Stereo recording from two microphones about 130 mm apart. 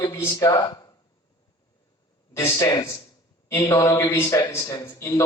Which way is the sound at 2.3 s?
20° left (ahead or behind).